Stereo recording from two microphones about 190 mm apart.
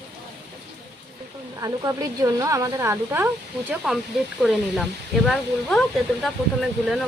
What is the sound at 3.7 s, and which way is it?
Speech, 5° right (ahead or behind).